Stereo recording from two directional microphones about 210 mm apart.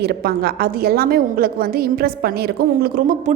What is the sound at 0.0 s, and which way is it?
A woman's voice, 50° right (ahead or behind).